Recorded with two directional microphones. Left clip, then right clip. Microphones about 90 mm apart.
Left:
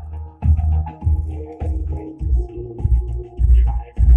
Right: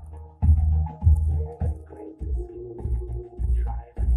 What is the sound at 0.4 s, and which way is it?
Music, 15° right (ahead or behind).